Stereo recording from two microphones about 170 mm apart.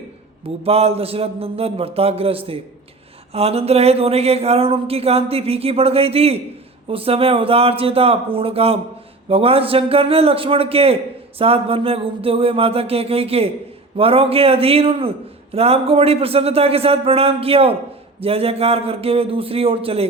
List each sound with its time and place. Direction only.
0.4 s speech: 35° right (ahead or behind)